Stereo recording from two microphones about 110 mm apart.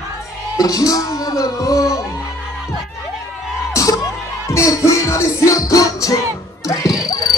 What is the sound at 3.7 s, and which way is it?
Music, 30° left (ahead or behind).